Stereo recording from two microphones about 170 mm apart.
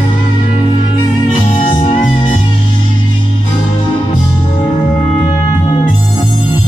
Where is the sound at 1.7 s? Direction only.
30° left (ahead or behind).